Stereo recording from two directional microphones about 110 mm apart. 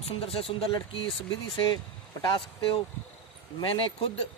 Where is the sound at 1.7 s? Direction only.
35° left (ahead or behind).